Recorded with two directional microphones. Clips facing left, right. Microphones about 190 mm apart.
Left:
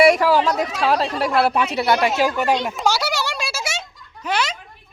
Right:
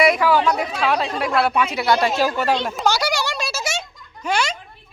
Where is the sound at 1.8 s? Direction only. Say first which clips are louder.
Left 1 dB; 20° left (ahead or behind).